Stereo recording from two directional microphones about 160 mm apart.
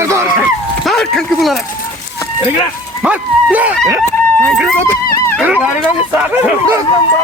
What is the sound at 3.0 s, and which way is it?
Dog, 10° right (ahead or behind).